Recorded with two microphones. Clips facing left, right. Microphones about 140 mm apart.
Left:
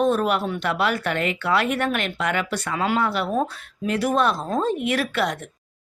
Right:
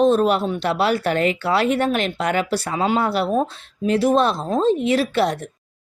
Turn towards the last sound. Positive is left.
turn(degrees=-35)  # may be behind; listen again after turning